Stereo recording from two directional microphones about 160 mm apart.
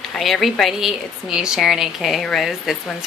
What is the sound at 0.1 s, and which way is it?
A woman's voice, centre (ahead or behind).